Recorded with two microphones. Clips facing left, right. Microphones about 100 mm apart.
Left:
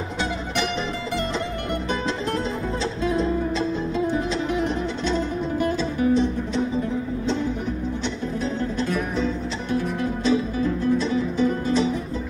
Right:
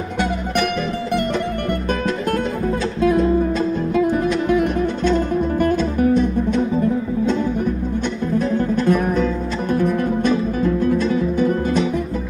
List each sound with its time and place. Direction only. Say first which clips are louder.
3.5 s music: right 5 dB; 50° right (ahead or behind)
8.8 s music: right 6 dB; 50° right (ahead or behind)